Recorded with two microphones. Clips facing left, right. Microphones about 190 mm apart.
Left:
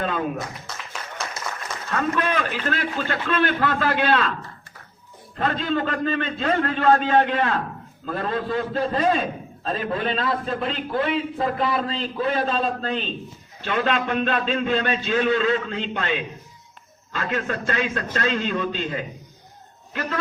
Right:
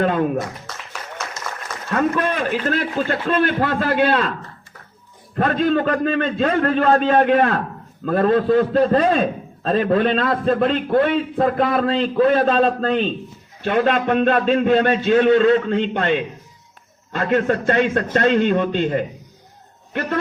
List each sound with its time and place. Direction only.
0.0 s a sound: 55° right (ahead or behind)
1.9 s a man's voice: 45° right (ahead or behind)
5.4 s a man's voice: 55° right (ahead or behind)